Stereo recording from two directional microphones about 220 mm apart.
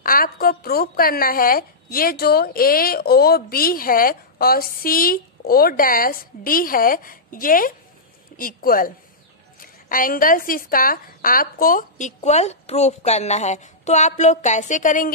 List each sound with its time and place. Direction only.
0.0 s speech: 40° left (ahead or behind)